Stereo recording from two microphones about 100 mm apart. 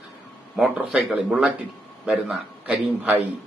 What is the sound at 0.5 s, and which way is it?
Speech, 5° right (ahead or behind).